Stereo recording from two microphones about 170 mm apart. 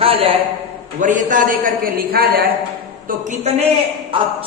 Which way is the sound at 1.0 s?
50° right (ahead or behind).